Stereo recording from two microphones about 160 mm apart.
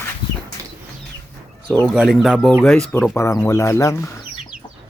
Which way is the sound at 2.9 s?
15° left (ahead or behind).